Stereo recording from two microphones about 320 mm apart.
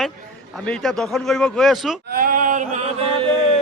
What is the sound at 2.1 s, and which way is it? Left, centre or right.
Chant, right.